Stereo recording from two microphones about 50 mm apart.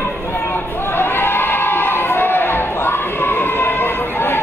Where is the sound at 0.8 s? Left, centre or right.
Left.